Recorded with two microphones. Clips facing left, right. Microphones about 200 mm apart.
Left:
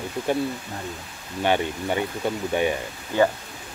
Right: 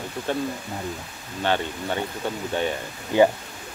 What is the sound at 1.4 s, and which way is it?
Speech, 15° left (ahead or behind).